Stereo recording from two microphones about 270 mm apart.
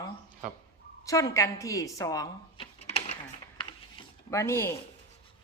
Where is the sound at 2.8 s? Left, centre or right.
Left.